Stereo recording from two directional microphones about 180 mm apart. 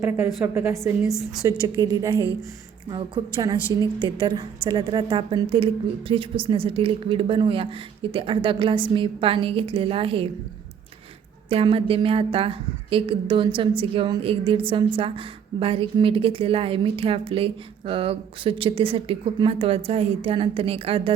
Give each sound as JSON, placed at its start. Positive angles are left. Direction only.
{"t": 0.4, "sound": "a woman's voice", "side_deg": -15}
{"t": 11.4, "sound": "a woman's voice", "side_deg": -30}